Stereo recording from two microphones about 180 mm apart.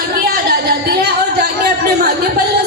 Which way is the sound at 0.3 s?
60° right (ahead or behind).